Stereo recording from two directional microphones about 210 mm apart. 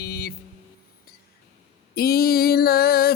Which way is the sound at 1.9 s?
45° left (ahead or behind).